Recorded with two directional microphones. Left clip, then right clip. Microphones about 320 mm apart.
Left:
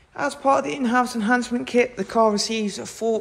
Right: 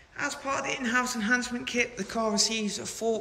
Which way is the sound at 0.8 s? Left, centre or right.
Centre.